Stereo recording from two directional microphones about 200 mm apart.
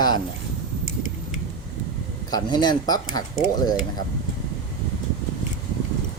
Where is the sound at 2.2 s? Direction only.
20° left (ahead or behind).